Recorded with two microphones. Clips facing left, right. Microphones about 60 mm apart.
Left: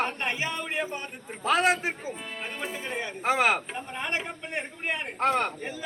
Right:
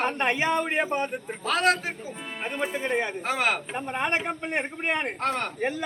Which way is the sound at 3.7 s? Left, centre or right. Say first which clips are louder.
Right 5 dB; right.